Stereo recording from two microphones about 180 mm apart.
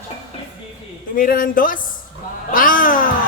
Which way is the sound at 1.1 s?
50° left (ahead or behind).